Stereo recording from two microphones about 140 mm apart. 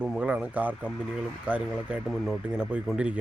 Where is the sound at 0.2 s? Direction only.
10° right (ahead or behind).